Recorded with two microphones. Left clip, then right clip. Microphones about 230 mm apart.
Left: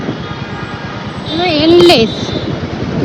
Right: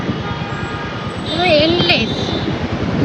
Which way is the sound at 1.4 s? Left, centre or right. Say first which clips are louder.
Left 5 dB; centre.